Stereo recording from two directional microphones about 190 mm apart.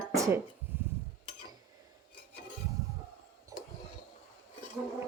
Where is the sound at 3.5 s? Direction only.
20° right (ahead or behind).